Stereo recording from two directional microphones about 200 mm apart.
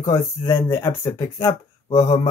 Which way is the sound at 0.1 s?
15° left (ahead or behind).